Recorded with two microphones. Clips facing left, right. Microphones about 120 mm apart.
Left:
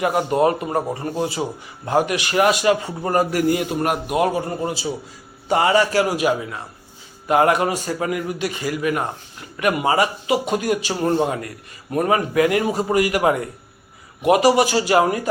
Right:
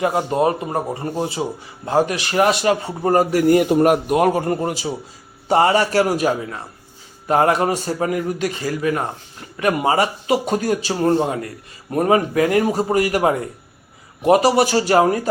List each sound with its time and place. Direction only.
0.0 s speech: 25° right (ahead or behind)
4.2 s a man's voice: 45° right (ahead or behind)
5.5 s speech: 35° right (ahead or behind)